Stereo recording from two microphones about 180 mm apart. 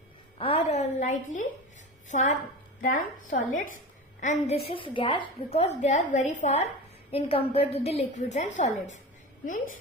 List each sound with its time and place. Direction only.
0.4 s a woman's voice: 35° left (ahead or behind)
4.6 s a woman's voice: 30° left (ahead or behind)